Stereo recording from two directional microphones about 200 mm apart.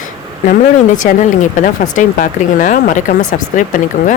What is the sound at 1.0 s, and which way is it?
Speech, 40° left (ahead or behind).